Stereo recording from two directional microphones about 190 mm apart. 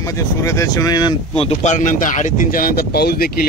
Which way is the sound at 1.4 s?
40° left (ahead or behind).